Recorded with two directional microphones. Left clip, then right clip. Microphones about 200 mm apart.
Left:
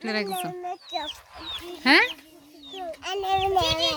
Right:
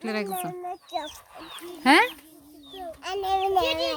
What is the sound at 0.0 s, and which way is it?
Speech, 5° right (ahead or behind).